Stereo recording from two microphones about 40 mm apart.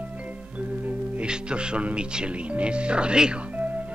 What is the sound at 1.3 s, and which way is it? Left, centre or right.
Speech, right.